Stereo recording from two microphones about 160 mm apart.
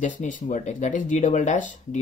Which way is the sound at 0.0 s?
55° left (ahead or behind).